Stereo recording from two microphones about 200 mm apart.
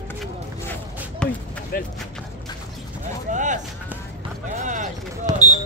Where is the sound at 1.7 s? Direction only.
50° left (ahead or behind).